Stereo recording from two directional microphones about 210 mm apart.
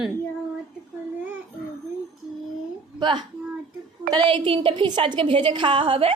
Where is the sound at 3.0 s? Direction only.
20° right (ahead or behind).